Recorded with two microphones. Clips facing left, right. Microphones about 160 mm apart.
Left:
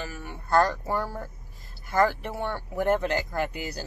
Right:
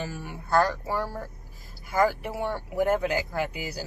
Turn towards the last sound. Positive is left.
turn(degrees=-10)  # may be behind; listen again after turning